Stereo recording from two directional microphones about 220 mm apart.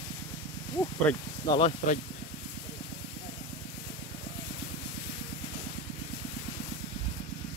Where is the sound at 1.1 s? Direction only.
5° left (ahead or behind).